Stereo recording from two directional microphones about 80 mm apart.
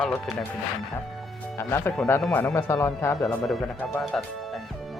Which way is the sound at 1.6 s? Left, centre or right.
Left.